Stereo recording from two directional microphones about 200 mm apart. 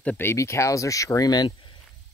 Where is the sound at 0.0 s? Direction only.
10° left (ahead or behind).